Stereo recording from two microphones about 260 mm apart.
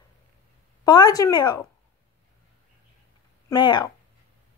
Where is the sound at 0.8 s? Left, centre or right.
Centre.